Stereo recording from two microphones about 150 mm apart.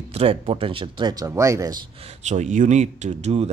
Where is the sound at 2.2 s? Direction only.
50° right (ahead or behind).